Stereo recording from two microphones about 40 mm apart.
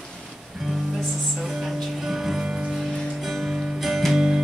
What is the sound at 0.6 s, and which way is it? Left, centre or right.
Music, centre.